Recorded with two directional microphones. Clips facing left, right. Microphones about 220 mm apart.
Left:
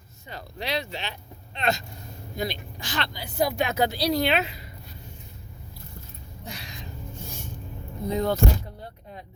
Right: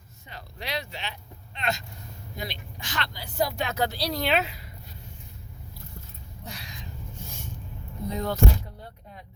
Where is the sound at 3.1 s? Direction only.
15° left (ahead or behind).